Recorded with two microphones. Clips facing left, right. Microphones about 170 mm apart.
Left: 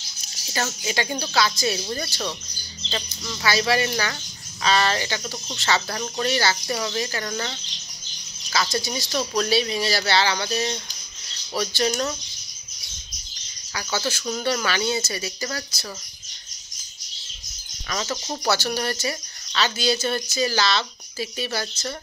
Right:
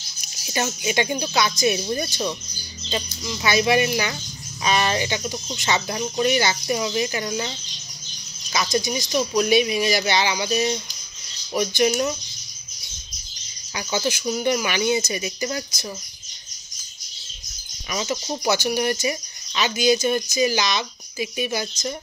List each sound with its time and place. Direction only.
0.5 s speech: 20° right (ahead or behind)
13.7 s speech: 15° right (ahead or behind)
17.8 s speech: 15° right (ahead or behind)